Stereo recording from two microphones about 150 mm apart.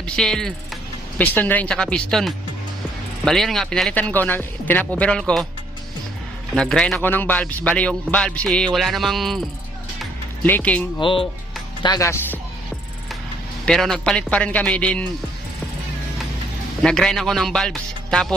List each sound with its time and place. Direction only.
0.0 s a man's voice: 5° left (ahead or behind)
6.5 s a man's voice: 5° left (ahead or behind)
7.0 s a man's voice: 10° left (ahead or behind)
10.4 s a man's voice: 10° left (ahead or behind)
11.0 s speech: 35° left (ahead or behind)
11.8 s speech: 25° left (ahead or behind)
13.7 s a man's voice: 5° left (ahead or behind)
16.8 s a man's voice: 5° left (ahead or behind)